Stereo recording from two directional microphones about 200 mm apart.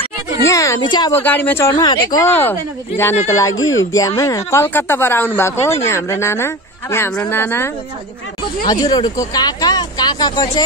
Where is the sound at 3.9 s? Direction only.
15° left (ahead or behind).